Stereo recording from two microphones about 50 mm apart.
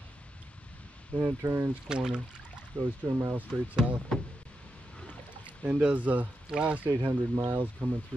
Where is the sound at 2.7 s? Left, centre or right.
Right.